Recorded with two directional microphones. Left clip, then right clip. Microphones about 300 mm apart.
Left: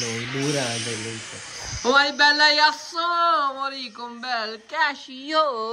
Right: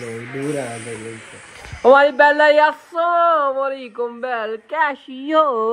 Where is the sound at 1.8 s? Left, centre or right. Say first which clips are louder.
Right 7 dB; centre.